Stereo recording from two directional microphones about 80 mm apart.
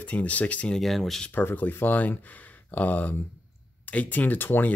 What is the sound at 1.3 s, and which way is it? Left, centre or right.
Speech, left.